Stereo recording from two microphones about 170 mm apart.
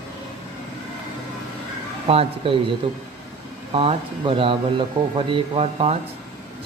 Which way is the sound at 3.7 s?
30° right (ahead or behind).